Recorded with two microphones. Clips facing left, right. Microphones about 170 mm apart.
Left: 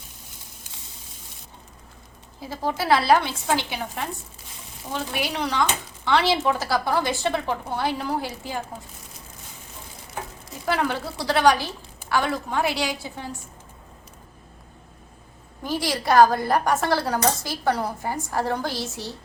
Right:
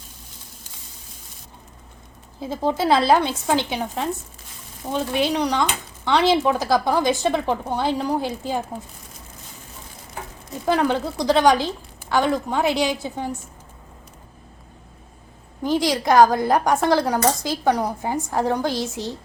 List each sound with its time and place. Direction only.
2.4 s a woman's voice: 20° right (ahead or behind)
10.7 s a woman's voice: 20° right (ahead or behind)
15.6 s a woman's voice: 20° right (ahead or behind)